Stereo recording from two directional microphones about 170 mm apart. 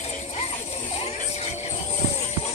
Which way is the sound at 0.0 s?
40° left (ahead or behind).